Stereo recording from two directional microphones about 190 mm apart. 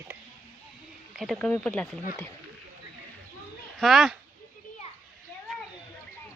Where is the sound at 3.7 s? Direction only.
Centre (ahead or behind).